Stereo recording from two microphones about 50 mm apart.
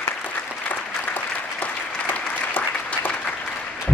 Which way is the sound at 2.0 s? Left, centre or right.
Left.